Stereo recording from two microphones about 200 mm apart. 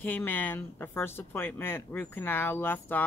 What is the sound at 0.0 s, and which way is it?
A woman's voice, 10° left (ahead or behind).